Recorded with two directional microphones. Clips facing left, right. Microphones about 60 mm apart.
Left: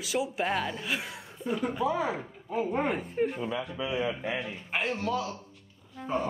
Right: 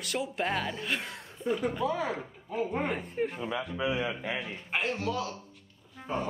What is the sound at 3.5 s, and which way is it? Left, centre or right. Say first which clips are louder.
Speech: right 1 dB; right.